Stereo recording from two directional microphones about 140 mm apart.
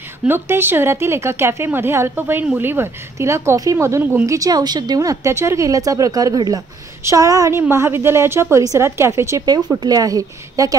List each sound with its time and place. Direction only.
0.3 s a woman's voice: 15° right (ahead or behind)